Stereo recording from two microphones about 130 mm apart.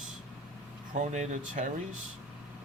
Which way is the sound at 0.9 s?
65° right (ahead or behind).